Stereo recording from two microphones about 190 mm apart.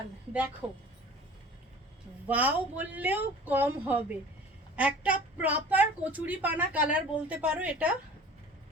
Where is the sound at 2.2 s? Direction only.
10° right (ahead or behind).